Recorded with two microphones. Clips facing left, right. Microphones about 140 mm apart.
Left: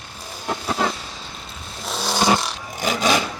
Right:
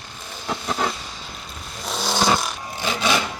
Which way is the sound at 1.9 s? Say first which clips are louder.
Left 1 dB; centre (ahead or behind).